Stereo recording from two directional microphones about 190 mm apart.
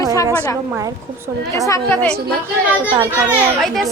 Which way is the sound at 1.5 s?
15° left (ahead or behind).